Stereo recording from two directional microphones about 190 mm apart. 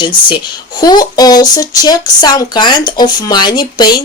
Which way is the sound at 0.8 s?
20° left (ahead or behind).